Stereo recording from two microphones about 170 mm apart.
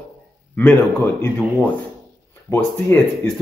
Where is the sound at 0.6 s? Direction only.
10° left (ahead or behind).